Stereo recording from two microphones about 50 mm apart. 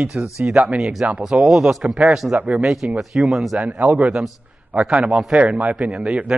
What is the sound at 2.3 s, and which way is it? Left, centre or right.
Speech, right.